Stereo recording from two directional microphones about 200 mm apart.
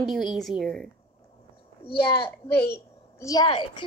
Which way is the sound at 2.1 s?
25° left (ahead or behind).